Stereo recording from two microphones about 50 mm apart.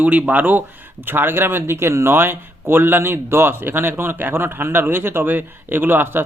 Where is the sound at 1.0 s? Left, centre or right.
Right.